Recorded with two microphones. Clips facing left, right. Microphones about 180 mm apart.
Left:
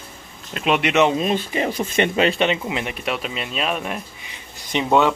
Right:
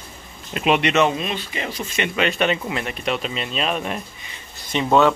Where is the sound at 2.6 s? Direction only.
15° left (ahead or behind).